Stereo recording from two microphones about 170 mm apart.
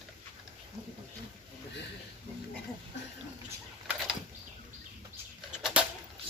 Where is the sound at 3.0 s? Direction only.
90° left.